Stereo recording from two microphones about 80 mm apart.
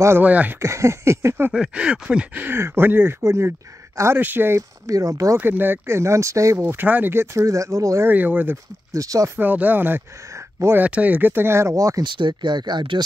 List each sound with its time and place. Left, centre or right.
0.2 s speech: centre
0.6 s speech: right
1.5 s speech: centre; by 4.6 s right
4.6 s speech: right
5.4 s speech: right
6.7 s speech: right
8.1 s speech: right
8.9 s speech: right
9.4 s speech: right
10.3 s a sound: right
10.8 s speech: centre; by 12.0 s right
12.0 s speech: right